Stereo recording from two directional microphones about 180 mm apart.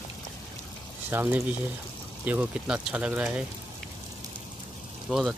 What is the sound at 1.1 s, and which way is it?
Speech, 10° right (ahead or behind).